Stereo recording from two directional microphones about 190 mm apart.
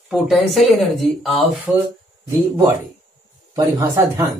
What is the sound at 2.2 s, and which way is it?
A man's voice, 15° right (ahead or behind).